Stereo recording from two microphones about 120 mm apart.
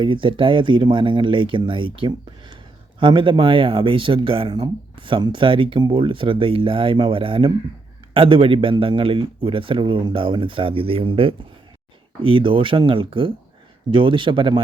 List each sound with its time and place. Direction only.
0.0 s speech: 45° right (ahead or behind)